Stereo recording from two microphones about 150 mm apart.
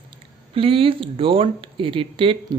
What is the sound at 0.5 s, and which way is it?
Speech, 35° right (ahead or behind).